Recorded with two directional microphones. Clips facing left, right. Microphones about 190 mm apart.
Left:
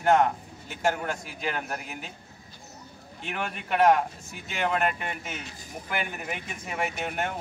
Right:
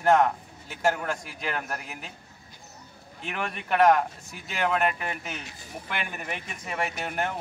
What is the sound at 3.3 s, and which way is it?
A man's voice, centre (ahead or behind).